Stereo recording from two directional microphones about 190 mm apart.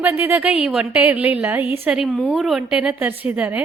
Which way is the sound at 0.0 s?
10° right (ahead or behind).